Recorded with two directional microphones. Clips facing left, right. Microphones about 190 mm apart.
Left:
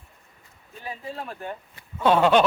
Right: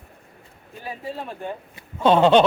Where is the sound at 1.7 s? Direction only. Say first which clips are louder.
Right 3 dB; 25° right (ahead or behind).